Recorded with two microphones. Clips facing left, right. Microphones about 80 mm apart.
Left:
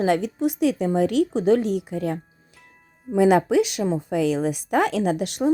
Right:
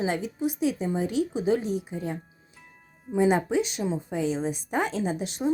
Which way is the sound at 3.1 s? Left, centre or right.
Left.